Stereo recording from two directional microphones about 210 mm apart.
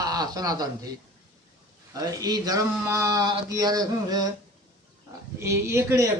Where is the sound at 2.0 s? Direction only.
15° right (ahead or behind).